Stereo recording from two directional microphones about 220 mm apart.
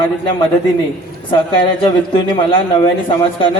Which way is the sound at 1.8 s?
25° left (ahead or behind).